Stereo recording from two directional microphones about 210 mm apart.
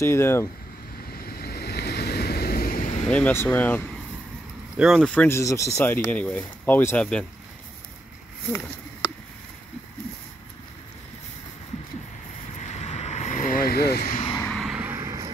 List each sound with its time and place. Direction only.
0.0 s speech: 10° left (ahead or behind)
1.1 s waves: 45° left (ahead or behind)
3.1 s speech: 10° left (ahead or behind)
12.5 s vehicle: 35° left (ahead or behind)
14.5 s vehicle: centre (ahead or behind)